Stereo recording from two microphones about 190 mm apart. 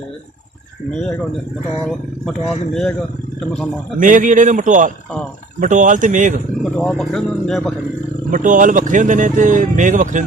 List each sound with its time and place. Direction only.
4.0 s speech: 45° right (ahead or behind)
6.7 s speech: 5° left (ahead or behind)
8.3 s speech: 45° right (ahead or behind)